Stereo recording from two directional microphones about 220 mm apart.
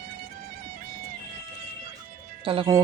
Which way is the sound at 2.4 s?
25° right (ahead or behind).